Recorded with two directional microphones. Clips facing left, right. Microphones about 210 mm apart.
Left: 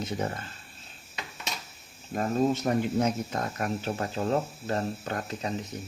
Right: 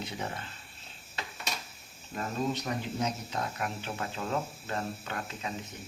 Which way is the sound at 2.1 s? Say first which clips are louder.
Left 7 dB; 50° left (ahead or behind).